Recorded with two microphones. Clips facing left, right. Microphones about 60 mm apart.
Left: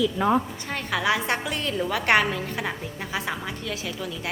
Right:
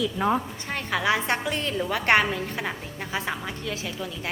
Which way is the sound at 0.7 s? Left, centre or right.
Right.